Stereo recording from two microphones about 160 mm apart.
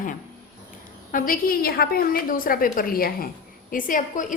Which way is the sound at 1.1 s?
60° left (ahead or behind).